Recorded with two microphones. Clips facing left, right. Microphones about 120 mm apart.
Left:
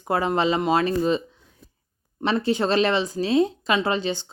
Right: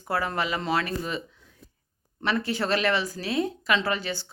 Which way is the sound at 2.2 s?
25° left (ahead or behind).